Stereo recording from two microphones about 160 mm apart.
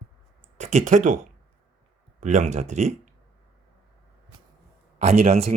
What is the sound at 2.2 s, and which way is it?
Speech, 50° right (ahead or behind).